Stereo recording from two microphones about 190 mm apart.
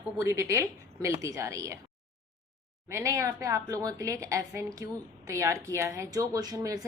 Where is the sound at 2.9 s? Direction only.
15° right (ahead or behind).